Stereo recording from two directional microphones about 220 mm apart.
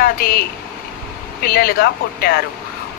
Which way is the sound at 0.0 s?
45° left (ahead or behind).